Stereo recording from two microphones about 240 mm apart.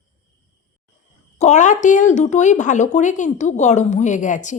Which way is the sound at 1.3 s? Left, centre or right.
Left.